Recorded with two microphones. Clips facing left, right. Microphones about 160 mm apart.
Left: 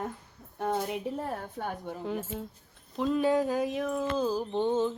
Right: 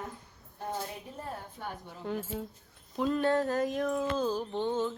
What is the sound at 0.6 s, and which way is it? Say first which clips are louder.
A woman's voice: left 7 dB; 70° left (ahead or behind).